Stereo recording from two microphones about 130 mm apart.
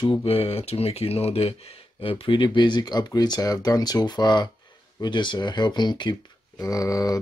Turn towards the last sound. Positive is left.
turn(degrees=25)  # may be behind; listen again after turning